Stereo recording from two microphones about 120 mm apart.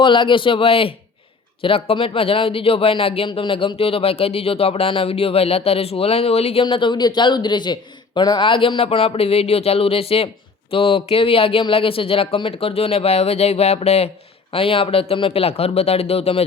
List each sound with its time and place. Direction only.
0.0 s speech: 45° left (ahead or behind); by 14.1 s 60° left (ahead or behind)
14.5 s speech: 50° left (ahead or behind)